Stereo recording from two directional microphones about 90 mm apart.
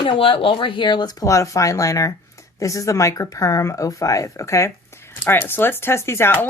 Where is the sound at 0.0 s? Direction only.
75° left (ahead or behind).